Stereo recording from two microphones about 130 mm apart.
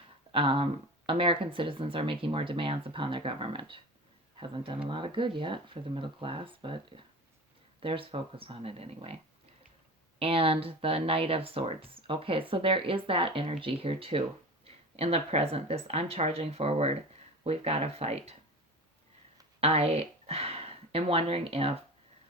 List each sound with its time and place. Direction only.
0.3 s speech: 45° right (ahead or behind)
10.2 s speech: 45° right (ahead or behind)
19.5 s speech: 50° right (ahead or behind)